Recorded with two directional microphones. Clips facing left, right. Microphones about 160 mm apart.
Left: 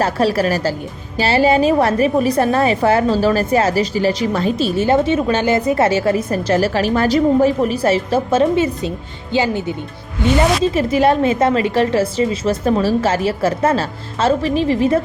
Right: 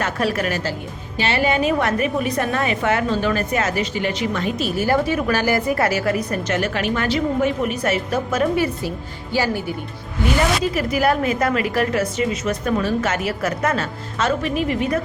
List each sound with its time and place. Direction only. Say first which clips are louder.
0.0 s a woman's voice: left 6 dB; 30° left (ahead or behind)